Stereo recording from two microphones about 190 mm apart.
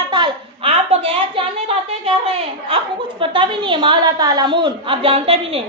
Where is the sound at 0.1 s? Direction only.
30° right (ahead or behind).